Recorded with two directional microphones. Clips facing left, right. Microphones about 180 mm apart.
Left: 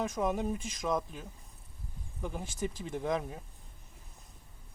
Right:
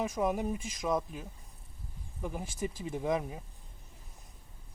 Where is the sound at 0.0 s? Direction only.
5° right (ahead or behind).